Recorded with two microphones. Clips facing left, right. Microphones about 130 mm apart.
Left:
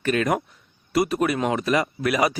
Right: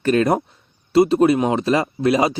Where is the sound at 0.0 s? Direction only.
35° right (ahead or behind).